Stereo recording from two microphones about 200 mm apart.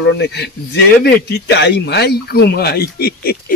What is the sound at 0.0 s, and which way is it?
Speech, 55° left (ahead or behind).